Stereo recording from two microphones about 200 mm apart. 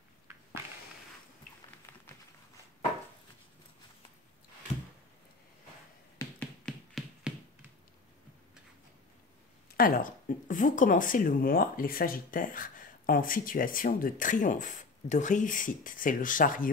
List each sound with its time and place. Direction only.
6.1 s finger snapping: 5° left (ahead or behind)
9.8 s speech: 45° left (ahead or behind)